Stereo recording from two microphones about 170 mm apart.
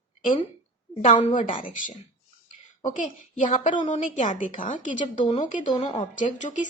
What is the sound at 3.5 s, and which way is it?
A woman's voice, 45° left (ahead or behind).